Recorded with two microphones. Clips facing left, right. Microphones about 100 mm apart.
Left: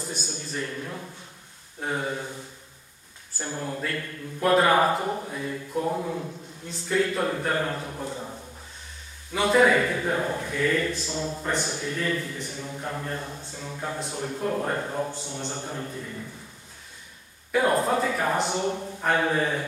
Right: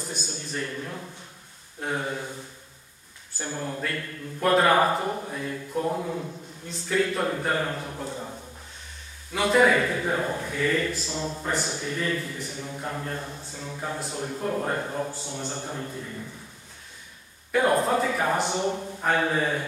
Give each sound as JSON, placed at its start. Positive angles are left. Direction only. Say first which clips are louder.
{"t": 0.1, "sound": "a man's voice", "louder": "even", "side_deg": 0}
{"t": 3.3, "sound": "a man's voice", "louder": "even", "side_deg": 0}
{"t": 9.3, "sound": "a man's voice", "louder": "even", "side_deg": 0}
{"t": 17.5, "sound": "a man's voice", "louder": "right 1 dB", "side_deg": 0}